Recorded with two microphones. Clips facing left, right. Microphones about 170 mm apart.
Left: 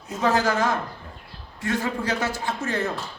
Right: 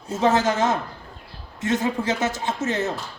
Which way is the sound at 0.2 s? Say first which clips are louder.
Right 2 dB; 20° right (ahead or behind).